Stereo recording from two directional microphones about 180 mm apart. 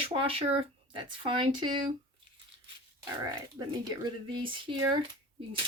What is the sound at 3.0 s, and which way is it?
Speech, 20° right (ahead or behind).